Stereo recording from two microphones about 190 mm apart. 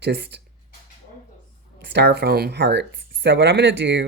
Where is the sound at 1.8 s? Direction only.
60° right (ahead or behind).